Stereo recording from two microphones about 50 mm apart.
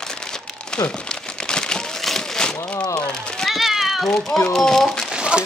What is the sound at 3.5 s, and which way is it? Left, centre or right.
Cat, centre.